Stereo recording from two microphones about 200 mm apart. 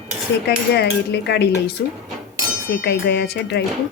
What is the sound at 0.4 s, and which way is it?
Speech, 55° left (ahead or behind).